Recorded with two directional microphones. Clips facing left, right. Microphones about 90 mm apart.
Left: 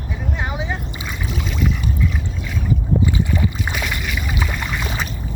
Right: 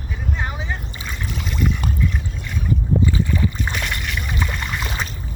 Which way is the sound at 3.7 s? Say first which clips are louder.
Left 1 dB; centre (ahead or behind).